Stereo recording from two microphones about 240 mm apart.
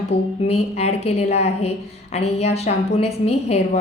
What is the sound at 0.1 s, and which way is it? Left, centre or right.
Speech, left.